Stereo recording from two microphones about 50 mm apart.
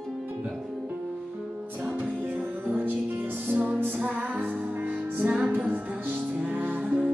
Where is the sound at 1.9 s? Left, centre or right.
Right.